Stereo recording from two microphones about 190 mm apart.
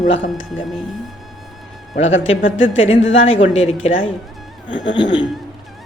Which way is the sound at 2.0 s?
90° left.